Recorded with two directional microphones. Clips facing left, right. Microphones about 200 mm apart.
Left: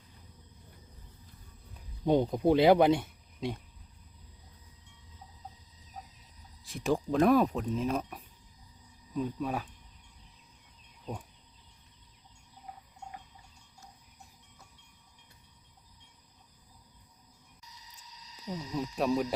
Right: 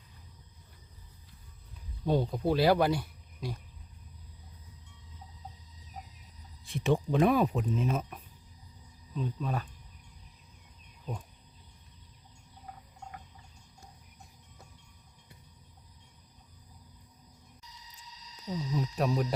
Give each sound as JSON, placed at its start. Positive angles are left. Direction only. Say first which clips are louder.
{"t": 2.0, "sound": "speech", "louder": "left 3 dB", "side_deg": 20}
{"t": 6.7, "sound": "speech", "louder": "right 1 dB", "side_deg": 0}
{"t": 9.1, "sound": "speech", "louder": "left 2 dB", "side_deg": 10}
{"t": 18.4, "sound": "speech", "louder": "right 2 dB", "side_deg": 5}